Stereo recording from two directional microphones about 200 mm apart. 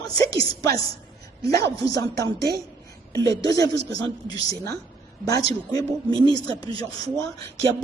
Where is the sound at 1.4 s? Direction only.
50° right (ahead or behind).